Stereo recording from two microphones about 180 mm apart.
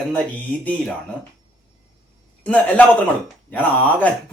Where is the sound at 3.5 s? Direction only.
10° left (ahead or behind).